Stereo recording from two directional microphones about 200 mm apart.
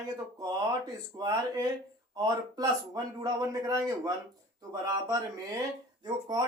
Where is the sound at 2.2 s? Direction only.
20° right (ahead or behind).